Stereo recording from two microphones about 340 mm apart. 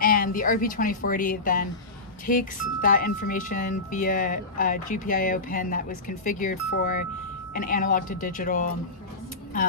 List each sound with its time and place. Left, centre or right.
0.0 s a woman's voice: left